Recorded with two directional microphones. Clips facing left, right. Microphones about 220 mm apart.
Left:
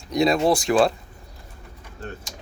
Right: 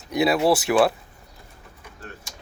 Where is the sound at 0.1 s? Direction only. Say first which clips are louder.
Even; 5° right (ahead or behind).